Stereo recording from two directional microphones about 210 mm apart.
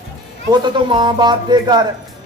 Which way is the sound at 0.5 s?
20° right (ahead or behind).